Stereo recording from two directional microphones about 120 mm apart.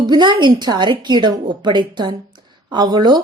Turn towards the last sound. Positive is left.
turn(degrees=-35)  # may be behind; listen again after turning